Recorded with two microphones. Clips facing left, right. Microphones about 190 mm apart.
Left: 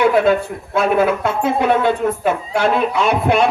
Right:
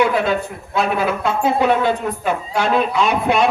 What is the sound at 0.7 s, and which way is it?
A woman's voice, 55° left (ahead or behind).